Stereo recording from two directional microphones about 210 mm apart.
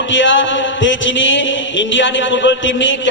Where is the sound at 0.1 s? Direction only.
60° left (ahead or behind).